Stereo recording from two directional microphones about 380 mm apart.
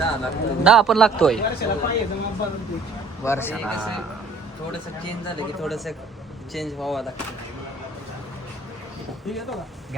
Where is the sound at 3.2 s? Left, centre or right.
Centre.